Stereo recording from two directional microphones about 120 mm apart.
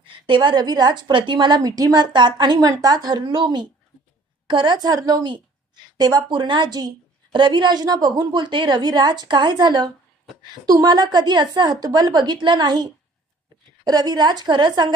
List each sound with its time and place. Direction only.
0.0 s a woman's voice: 45° right (ahead or behind)